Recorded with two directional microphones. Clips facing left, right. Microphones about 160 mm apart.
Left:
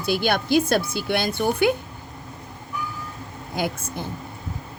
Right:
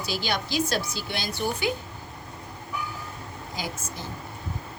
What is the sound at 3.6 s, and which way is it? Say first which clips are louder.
Speech: left 9 dB; 60° left (ahead or behind).